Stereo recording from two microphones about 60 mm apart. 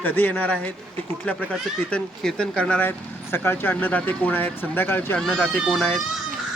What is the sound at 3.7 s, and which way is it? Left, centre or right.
Speech, left.